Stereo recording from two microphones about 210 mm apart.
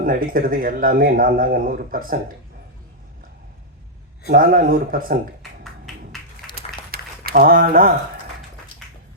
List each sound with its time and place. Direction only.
0.0 s speech: 45° right (ahead or behind)
4.3 s speech: 40° right (ahead or behind)
5.4 s music: centre (ahead or behind)
6.9 s speech: 45° right (ahead or behind)